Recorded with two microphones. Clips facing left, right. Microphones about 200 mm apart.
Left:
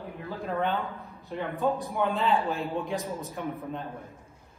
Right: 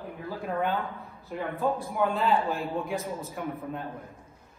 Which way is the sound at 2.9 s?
15° left (ahead or behind).